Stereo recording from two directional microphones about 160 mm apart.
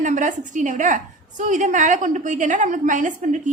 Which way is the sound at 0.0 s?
50° right (ahead or behind).